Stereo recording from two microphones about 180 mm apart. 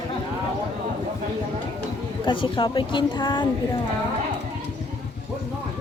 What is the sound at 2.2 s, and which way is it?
Speech, 30° left (ahead or behind).